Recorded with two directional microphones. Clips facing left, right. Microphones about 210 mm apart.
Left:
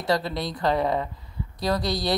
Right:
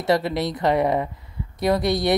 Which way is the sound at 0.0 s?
25° right (ahead or behind).